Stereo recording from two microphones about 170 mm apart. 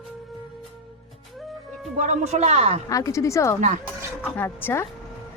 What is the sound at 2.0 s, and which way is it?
Speech, 40° right (ahead or behind).